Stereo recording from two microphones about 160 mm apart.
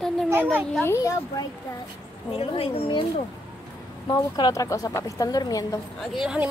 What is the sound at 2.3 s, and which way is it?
A woman's voice, 35° left (ahead or behind).